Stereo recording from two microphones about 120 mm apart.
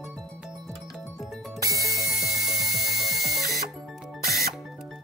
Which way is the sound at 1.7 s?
25° right (ahead or behind).